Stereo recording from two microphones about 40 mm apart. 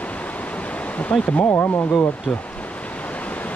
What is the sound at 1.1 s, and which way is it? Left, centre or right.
Speech, left.